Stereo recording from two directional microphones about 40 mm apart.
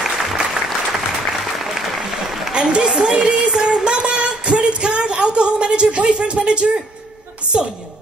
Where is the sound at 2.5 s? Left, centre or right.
Right.